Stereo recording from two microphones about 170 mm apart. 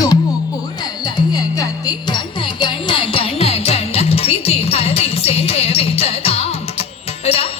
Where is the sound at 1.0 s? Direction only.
25° left (ahead or behind).